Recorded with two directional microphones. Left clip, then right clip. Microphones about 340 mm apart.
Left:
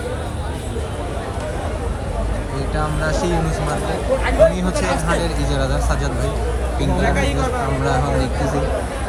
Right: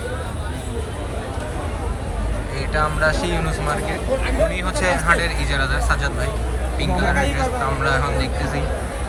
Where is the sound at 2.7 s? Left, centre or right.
Centre.